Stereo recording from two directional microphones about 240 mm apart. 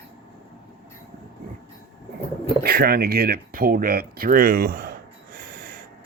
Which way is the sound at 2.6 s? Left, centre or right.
Right.